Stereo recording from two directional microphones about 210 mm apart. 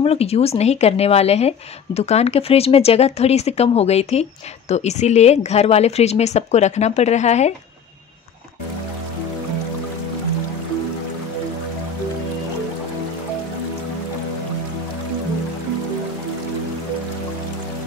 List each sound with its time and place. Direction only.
0.0 s speech: 30° left (ahead or behind)